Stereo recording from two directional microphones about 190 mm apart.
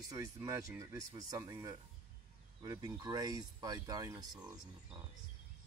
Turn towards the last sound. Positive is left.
turn(degrees=-20)  # may be behind; listen again after turning